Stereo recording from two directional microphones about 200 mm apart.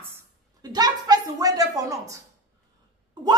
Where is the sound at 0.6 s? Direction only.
20° right (ahead or behind).